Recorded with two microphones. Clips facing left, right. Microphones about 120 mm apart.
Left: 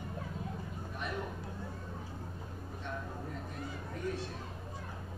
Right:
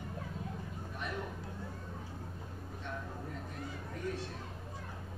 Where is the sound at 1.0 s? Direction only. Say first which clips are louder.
Left 1 dB; 20° left (ahead or behind).